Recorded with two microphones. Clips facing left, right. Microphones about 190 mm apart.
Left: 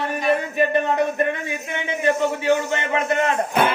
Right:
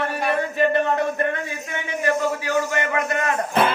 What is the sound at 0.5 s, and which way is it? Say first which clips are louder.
A man's voice: even; 15° left (ahead or behind).